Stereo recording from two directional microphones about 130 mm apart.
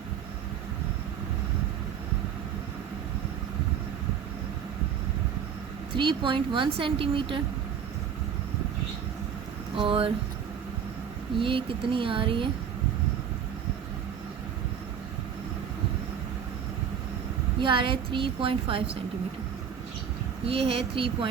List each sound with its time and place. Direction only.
6.0 s a woman's voice: 40° right (ahead or behind)
9.7 s speech: 45° right (ahead or behind)
11.3 s a woman's voice: 40° right (ahead or behind)
17.6 s a woman's voice: 40° right (ahead or behind)
20.5 s speech: 50° right (ahead or behind)